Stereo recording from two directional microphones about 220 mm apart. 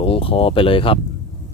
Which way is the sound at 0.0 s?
25° left (ahead or behind).